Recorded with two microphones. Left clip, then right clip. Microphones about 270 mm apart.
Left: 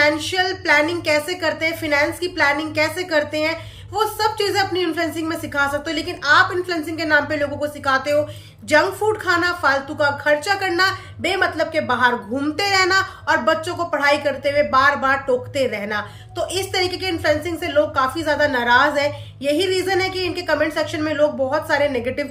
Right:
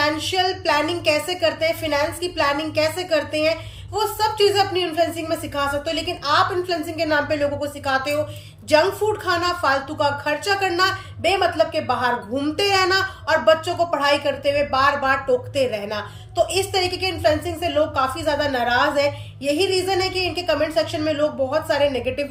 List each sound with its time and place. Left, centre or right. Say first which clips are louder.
0.0 s a woman's voice: left 2 dB; centre